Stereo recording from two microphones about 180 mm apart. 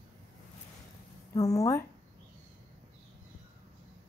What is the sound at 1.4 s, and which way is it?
Speech, 20° left (ahead or behind).